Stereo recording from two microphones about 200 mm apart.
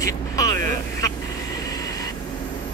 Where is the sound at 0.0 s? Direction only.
15° left (ahead or behind).